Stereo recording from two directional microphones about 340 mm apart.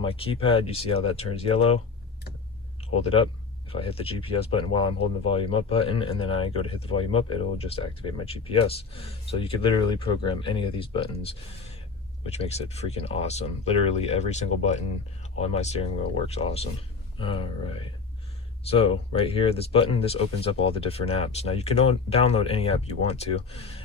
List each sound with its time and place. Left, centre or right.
0.0 s speech: centre
2.9 s speech: centre
12.2 s speech: centre